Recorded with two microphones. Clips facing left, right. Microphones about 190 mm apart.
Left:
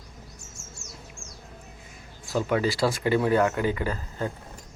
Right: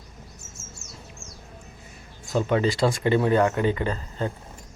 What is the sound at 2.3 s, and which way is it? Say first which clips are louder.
Speech: right 2 dB; 25° right (ahead or behind).